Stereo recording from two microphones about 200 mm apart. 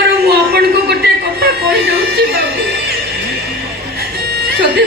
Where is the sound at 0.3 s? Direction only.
55° right (ahead or behind).